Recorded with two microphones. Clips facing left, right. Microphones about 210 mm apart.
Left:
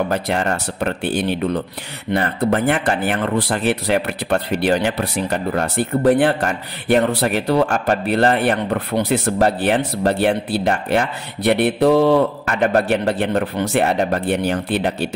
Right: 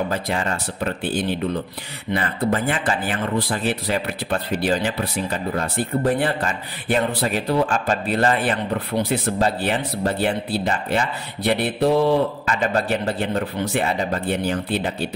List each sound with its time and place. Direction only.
0.1 s speech: 65° left (ahead or behind)
12.4 s speech: 60° left (ahead or behind)